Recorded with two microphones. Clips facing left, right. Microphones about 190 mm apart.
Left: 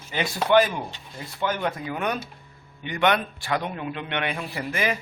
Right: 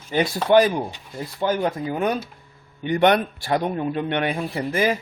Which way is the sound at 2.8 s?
45° right (ahead or behind).